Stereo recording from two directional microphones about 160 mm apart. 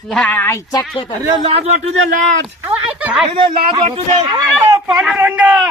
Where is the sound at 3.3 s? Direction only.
30° right (ahead or behind).